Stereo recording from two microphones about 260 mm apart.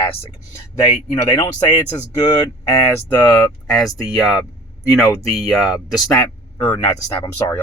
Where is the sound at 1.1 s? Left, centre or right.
Centre.